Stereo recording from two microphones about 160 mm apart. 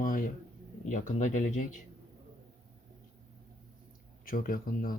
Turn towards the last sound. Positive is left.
turn(degrees=60)  # may be behind; listen again after turning